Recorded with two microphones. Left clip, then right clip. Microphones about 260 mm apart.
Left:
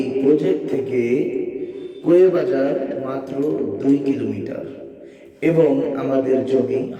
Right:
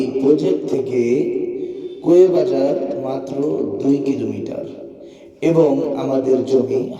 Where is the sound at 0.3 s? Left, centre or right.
Centre.